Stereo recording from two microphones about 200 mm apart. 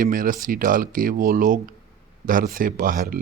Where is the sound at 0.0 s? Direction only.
45° right (ahead or behind).